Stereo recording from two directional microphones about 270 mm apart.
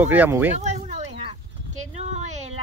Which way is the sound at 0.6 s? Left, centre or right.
Right.